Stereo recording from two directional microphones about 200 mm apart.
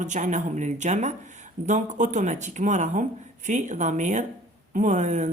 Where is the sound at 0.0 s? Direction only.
40° right (ahead or behind).